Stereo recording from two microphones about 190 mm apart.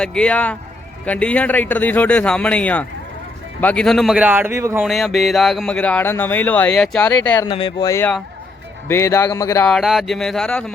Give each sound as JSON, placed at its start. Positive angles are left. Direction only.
{"t": 0.0, "sound": "speech", "side_deg": 5}
{"t": 4.9, "sound": "speech", "side_deg": 0}
{"t": 7.4, "sound": "speech", "side_deg": 25}
{"t": 9.6, "sound": "speech", "side_deg": 0}